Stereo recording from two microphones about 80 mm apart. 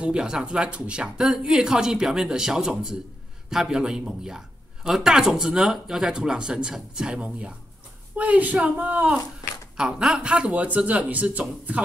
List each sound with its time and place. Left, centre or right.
0.0 s speech: centre